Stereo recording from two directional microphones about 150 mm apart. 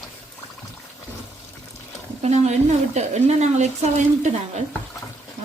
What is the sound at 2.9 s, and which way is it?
Speech, 50° right (ahead or behind).